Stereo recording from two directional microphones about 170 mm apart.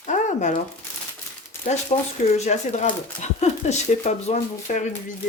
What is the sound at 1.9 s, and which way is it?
Speech, 35° left (ahead or behind).